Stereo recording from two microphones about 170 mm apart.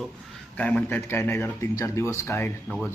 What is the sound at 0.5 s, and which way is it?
Speech, 10° left (ahead or behind).